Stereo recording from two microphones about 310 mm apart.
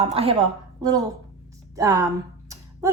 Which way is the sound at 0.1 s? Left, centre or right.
Centre.